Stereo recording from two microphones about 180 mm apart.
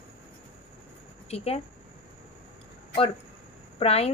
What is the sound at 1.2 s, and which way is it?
Speech, 35° left (ahead or behind).